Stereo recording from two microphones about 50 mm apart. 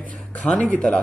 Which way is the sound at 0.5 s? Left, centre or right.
Left.